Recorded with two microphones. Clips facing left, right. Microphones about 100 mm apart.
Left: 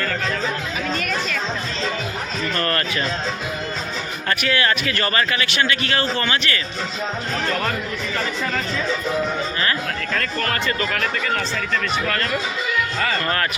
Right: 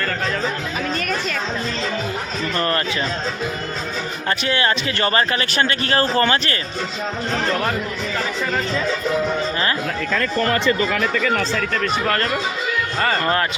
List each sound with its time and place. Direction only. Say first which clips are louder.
2.6 s speech: right 2 dB; 20° right (ahead or behind)
4.3 s speech: even; 30° right (ahead or behind)
12.0 s speech: right 3 dB; 35° right (ahead or behind)